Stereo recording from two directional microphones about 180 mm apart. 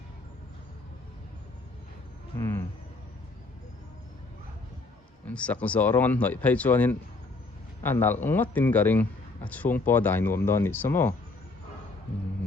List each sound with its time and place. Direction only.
2.4 s speech: 15° left (ahead or behind)
5.2 s a man's voice: 5° left (ahead or behind)